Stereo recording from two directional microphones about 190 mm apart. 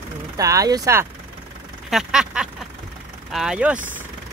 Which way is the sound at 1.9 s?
5° right (ahead or behind).